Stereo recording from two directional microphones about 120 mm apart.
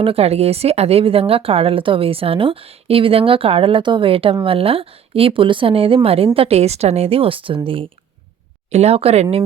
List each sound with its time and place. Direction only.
0.0 s speech: 55° right (ahead or behind)
8.7 s speech: 60° right (ahead or behind)